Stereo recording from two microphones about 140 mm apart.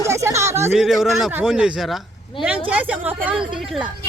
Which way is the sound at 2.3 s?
35° left (ahead or behind).